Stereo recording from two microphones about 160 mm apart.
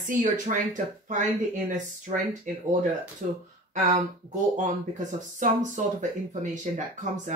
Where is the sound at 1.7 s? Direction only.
50° right (ahead or behind).